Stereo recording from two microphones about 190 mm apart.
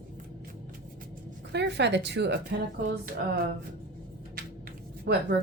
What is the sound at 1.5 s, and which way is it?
Speech, 65° right (ahead or behind).